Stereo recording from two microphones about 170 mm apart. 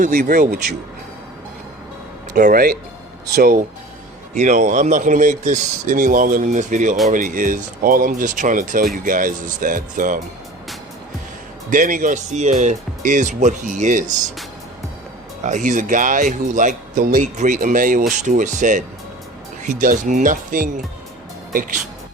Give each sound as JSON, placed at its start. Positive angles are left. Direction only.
{"t": 0.0, "sound": "speech", "side_deg": -55}
{"t": 2.3, "sound": "speech", "side_deg": -60}
{"t": 4.4, "sound": "speech", "side_deg": -45}
{"t": 11.7, "sound": "speech", "side_deg": -50}
{"t": 15.4, "sound": "speech", "side_deg": -45}